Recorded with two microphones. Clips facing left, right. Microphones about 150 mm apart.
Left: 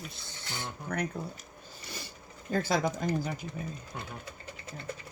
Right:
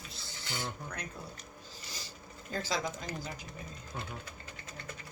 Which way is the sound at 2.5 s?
55° left (ahead or behind).